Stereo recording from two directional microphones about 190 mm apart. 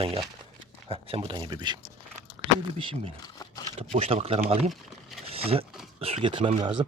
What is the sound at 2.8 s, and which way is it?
Speech, 25° right (ahead or behind).